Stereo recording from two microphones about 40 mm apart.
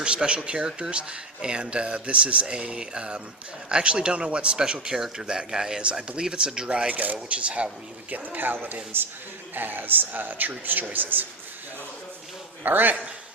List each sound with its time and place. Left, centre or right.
0.0 s speech: right
6.9 s speech: right
8.1 s a man's voice: right
12.6 s a man's voice: right